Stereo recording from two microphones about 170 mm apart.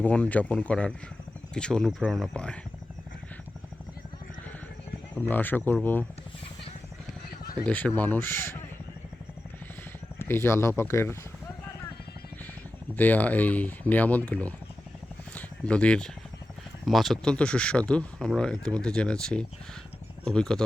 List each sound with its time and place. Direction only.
0.0 s speech: 10° left (ahead or behind)
5.1 s speech: 10° left (ahead or behind)
7.6 s speech: 10° left (ahead or behind)
10.2 s speech: 15° left (ahead or behind)
13.0 s speech: 10° left (ahead or behind)